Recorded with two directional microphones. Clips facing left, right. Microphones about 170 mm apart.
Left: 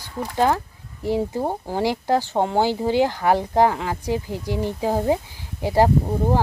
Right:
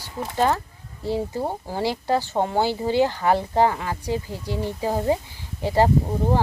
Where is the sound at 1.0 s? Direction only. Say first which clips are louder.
Left 3 dB; 15° left (ahead or behind).